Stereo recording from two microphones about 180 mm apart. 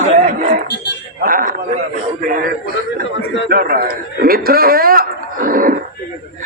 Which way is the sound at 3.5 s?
55° right (ahead or behind).